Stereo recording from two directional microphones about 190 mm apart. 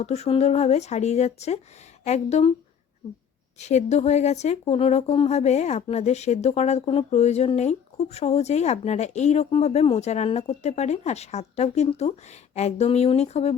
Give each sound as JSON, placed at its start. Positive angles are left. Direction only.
{"t": 0.0, "sound": "speech", "side_deg": 35}
{"t": 3.6, "sound": "speech", "side_deg": 35}